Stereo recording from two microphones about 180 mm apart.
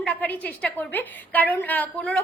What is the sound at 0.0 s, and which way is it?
A woman's voice, 10° left (ahead or behind).